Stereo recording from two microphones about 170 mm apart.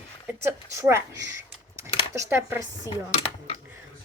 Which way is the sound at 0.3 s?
15° right (ahead or behind).